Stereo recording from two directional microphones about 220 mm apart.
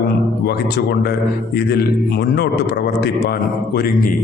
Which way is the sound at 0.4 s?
45° left (ahead or behind).